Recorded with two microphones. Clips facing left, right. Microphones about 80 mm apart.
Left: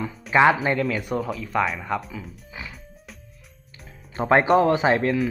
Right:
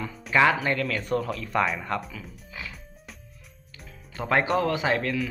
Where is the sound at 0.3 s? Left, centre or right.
Centre.